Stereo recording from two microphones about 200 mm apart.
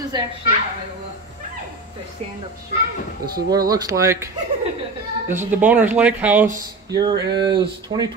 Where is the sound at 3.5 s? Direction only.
20° right (ahead or behind).